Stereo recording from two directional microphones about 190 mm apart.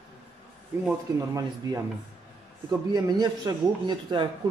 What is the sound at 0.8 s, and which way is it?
Speech, 15° right (ahead or behind).